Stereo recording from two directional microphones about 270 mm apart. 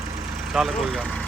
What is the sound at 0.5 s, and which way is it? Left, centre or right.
Speech, centre.